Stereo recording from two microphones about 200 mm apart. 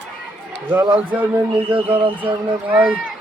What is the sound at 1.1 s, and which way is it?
Speech, 10° right (ahead or behind).